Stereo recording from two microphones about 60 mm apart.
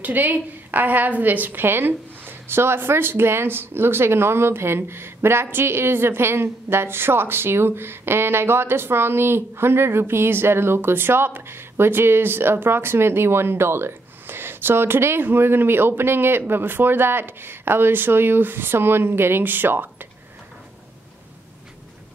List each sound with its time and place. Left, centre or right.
0.0 s a woman's voice: right